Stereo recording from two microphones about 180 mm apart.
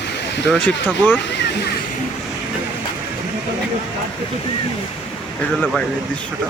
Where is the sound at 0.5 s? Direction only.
5° left (ahead or behind).